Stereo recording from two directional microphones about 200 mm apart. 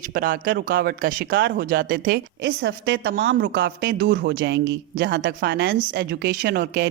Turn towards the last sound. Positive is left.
turn(degrees=-55)  # may be behind; listen again after turning